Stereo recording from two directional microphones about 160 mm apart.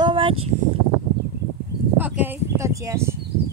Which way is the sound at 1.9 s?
10° right (ahead or behind).